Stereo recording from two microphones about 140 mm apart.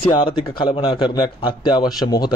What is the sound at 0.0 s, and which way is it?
A man's voice, 40° left (ahead or behind).